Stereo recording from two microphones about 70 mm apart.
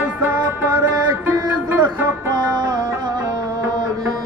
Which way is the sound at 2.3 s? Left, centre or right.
Right.